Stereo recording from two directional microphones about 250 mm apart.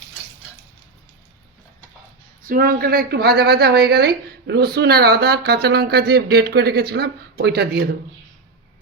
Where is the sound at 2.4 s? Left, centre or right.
Right.